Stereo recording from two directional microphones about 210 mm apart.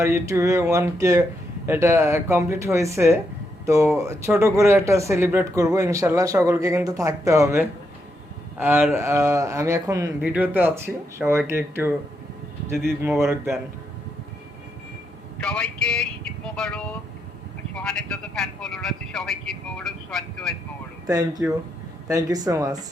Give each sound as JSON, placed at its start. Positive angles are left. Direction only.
{"t": 0.0, "sound": "speech", "side_deg": -15}
{"t": 13.0, "sound": "speech", "side_deg": -10}
{"t": 15.4, "sound": "speech", "side_deg": 5}
{"t": 21.1, "sound": "speech", "side_deg": -15}